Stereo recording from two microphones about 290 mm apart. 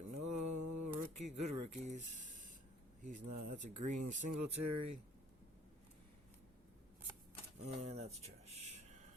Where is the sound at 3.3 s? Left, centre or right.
Right.